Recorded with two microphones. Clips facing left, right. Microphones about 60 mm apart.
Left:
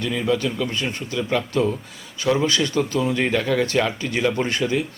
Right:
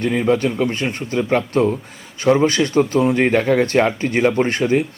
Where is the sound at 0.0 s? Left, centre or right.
Right.